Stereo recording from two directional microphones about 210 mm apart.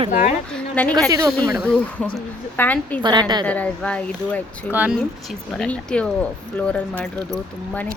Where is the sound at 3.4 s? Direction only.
5° left (ahead or behind).